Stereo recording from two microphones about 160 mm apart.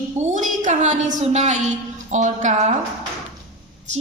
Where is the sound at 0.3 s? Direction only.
50° right (ahead or behind).